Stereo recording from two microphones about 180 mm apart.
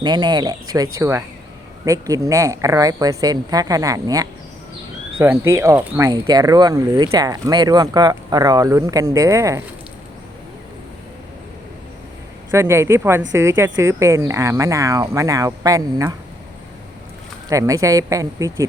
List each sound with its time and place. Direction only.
0.0 s speech: 25° right (ahead or behind)
12.5 s speech: 15° right (ahead or behind)
17.5 s speech: 20° right (ahead or behind)